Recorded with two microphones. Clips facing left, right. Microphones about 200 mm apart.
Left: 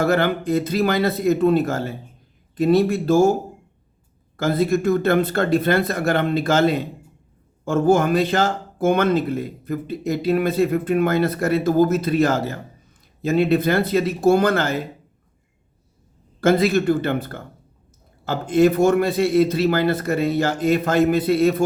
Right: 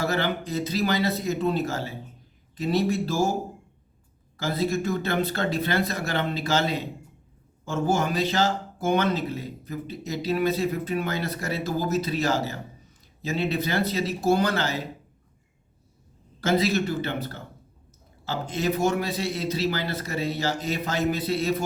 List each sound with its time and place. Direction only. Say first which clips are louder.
0.0 s speech: left 7 dB; 55° left (ahead or behind)
4.4 s speech: left 7 dB; 55° left (ahead or behind)
16.4 s speech: left 6 dB; 55° left (ahead or behind)